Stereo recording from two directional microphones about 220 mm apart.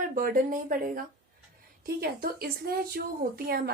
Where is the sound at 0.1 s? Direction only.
40° right (ahead or behind).